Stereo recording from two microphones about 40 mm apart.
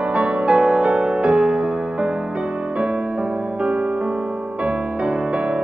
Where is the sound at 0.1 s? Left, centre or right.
Right.